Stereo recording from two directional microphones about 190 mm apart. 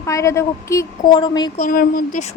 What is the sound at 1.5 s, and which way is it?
Speech, 45° left (ahead or behind).